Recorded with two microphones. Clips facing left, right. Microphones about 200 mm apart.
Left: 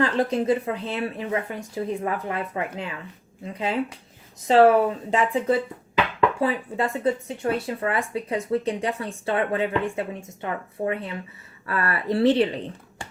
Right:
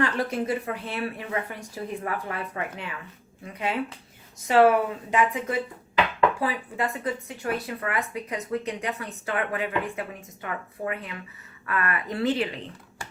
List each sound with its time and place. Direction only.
0.0 s speech: 25° left (ahead or behind)